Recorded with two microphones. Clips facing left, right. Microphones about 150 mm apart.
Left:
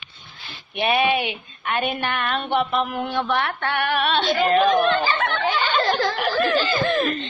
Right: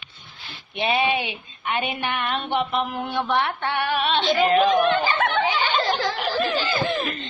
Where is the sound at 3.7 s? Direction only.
65° left (ahead or behind).